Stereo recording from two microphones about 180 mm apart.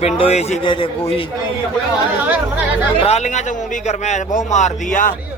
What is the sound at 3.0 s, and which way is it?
A man's voice, 40° left (ahead or behind).